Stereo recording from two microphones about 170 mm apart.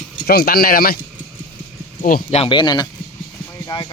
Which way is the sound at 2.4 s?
25° left (ahead or behind).